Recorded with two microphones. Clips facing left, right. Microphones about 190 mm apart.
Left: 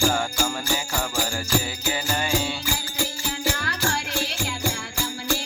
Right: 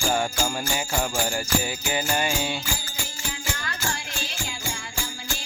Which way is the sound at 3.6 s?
70° left (ahead or behind).